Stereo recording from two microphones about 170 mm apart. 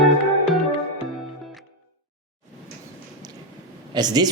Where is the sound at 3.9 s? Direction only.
25° right (ahead or behind).